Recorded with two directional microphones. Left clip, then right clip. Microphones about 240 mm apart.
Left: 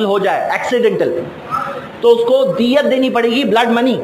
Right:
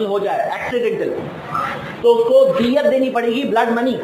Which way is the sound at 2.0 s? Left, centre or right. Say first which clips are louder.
Left 1 dB; left.